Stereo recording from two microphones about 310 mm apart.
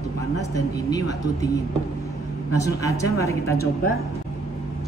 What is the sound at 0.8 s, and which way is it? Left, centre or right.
Speech, centre.